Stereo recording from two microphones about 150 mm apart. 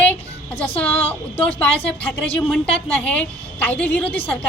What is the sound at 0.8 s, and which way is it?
A woman's voice, 10° left (ahead or behind).